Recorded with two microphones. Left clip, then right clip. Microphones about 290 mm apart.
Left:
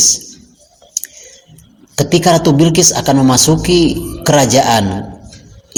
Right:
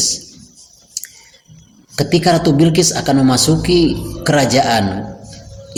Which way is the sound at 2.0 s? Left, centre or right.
Centre.